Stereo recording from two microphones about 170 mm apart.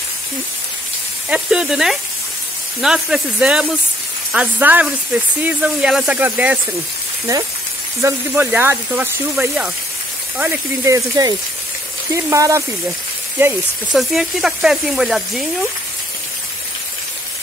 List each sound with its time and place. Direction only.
1.3 s speech: 5° right (ahead or behind)
8.0 s speech: 10° right (ahead or behind)
10.9 s speech: 20° right (ahead or behind)
13.9 s speech: centre (ahead or behind)